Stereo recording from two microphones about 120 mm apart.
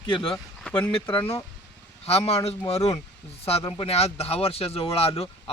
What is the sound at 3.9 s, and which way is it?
Speech, 60° left (ahead or behind).